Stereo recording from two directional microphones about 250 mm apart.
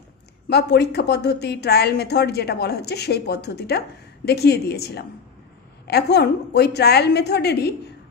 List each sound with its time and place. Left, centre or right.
0.5 s a woman's voice: left